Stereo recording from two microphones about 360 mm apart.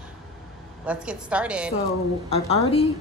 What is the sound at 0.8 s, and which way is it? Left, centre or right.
Speech, centre.